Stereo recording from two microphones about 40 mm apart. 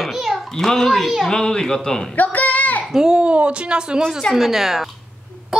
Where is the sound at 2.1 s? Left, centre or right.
Left.